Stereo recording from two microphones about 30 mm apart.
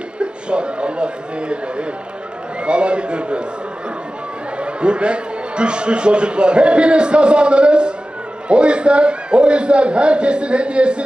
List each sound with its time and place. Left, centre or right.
0.2 s a man's voice: right
4.5 s a man's voice: right